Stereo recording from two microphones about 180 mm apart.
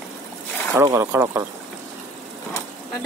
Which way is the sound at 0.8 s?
15° right (ahead or behind).